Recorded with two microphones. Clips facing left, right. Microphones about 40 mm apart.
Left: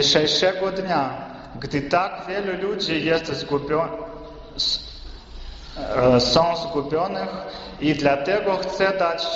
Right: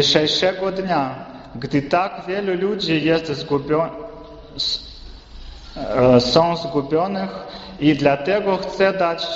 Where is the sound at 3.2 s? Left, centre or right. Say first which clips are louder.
Right 3 dB; right.